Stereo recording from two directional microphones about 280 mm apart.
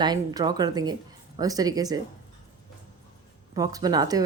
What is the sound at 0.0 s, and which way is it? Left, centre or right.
Speech, centre.